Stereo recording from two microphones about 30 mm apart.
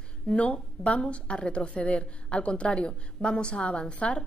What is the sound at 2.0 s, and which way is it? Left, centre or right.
A woman's voice, left.